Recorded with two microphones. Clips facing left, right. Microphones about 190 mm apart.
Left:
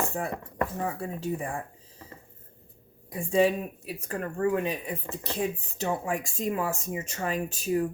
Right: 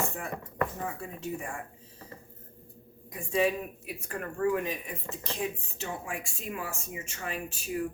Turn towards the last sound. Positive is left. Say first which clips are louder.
# left 6 dB
turn(degrees=40)  # may be behind; listen again after turning